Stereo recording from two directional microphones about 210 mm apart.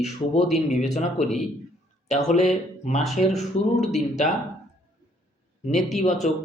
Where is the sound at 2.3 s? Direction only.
35° left (ahead or behind).